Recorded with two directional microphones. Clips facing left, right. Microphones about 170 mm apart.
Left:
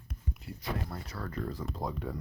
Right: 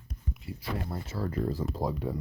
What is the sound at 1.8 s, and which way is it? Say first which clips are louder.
Speech: right 5 dB; 5° right (ahead or behind).